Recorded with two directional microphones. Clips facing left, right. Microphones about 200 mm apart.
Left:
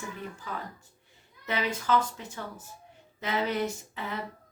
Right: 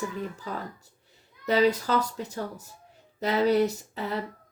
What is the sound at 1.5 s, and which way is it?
Speech, 40° right (ahead or behind).